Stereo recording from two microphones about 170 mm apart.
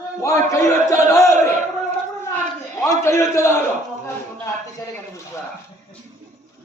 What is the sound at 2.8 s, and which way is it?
Speech, 15° left (ahead or behind).